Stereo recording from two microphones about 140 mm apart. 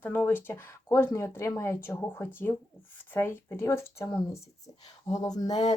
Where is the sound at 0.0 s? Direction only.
15° left (ahead or behind).